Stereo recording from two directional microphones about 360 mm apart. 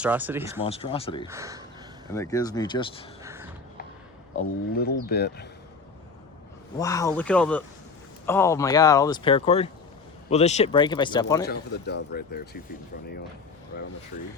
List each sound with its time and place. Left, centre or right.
0.0 s speech: centre
0.6 s speech: centre
1.3 s speech: centre
2.1 s speech: centre
3.2 s a sound: centre
4.4 s speech: left
6.7 s speech: centre
11.4 s speech: left